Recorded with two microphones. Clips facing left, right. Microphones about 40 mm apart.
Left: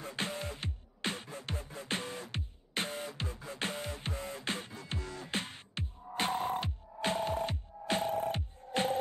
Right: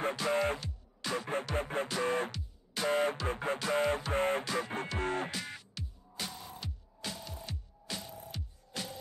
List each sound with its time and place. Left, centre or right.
0.3 s music: right
0.6 s music: left
1.1 s music: right
2.3 s music: left
2.9 s music: right
5.3 s music: left